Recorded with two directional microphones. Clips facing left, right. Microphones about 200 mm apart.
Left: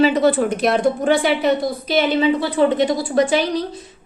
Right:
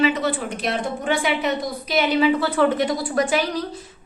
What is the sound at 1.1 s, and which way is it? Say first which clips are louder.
A woman's voice: left 2 dB; 35° left (ahead or behind).